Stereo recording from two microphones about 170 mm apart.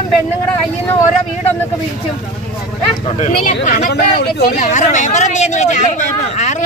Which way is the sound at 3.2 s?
45° left (ahead or behind).